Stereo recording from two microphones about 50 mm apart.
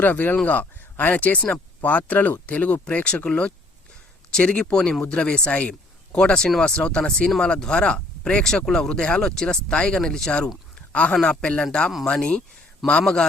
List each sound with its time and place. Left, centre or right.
0.0 s speech: left; by 13.2 s centre